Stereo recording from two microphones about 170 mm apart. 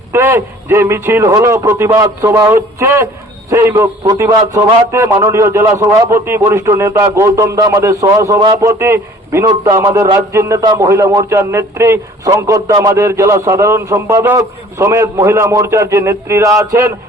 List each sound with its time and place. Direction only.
0.1 s speech: 15° right (ahead or behind)